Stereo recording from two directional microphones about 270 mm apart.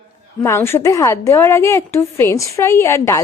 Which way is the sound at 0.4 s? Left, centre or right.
Centre.